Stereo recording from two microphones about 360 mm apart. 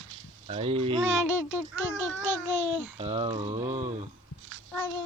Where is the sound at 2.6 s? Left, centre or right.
Right.